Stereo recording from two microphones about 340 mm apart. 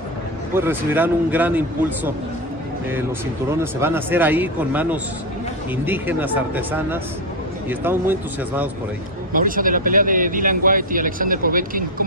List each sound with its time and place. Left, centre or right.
0.6 s a man's voice: centre
3.8 s a man's voice: centre
9.3 s speech: right